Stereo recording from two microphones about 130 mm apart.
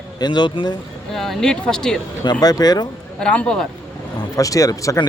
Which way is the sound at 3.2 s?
10° left (ahead or behind).